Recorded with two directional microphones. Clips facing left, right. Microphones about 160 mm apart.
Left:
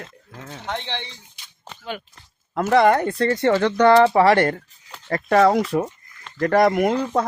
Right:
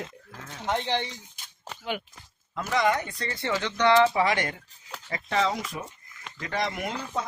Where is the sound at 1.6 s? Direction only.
5° right (ahead or behind).